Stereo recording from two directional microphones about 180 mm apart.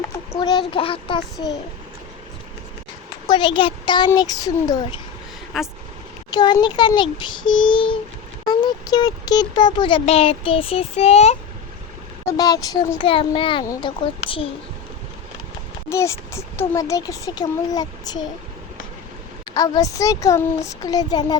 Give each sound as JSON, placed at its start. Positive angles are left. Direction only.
{"t": 0.0, "sound": "a sound", "side_deg": 25}
{"t": 0.7, "sound": "speech", "side_deg": 30}
{"t": 3.2, "sound": "speech", "side_deg": 25}
{"t": 5.5, "sound": "speech", "side_deg": 0}
{"t": 6.3, "sound": "speech", "side_deg": 25}
{"t": 12.4, "sound": "speech", "side_deg": 20}
{"t": 15.9, "sound": "a child's voice", "side_deg": 15}
{"t": 19.5, "sound": "speech", "side_deg": 20}